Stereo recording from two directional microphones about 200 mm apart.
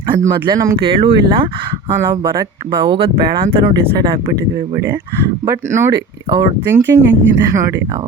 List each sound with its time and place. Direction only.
0.3 s speech: 15° right (ahead or behind)
0.8 s speech: 25° right (ahead or behind)
2.0 s speech: 15° right (ahead or behind)
5.5 s speech: 15° right (ahead or behind)